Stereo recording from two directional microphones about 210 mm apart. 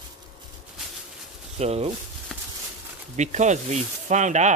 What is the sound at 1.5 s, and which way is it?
Speech, 30° right (ahead or behind).